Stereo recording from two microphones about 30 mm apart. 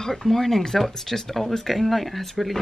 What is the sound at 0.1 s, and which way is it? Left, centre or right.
Speech, centre.